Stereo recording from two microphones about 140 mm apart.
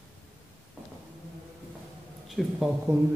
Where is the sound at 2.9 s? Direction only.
20° right (ahead or behind).